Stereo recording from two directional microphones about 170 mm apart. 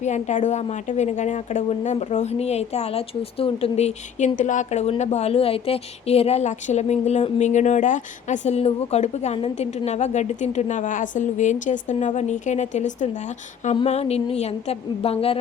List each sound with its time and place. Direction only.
0.0 s a woman's voice: 45° left (ahead or behind)